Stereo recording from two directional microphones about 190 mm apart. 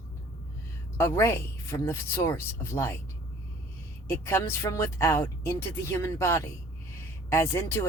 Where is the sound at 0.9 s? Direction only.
15° left (ahead or behind).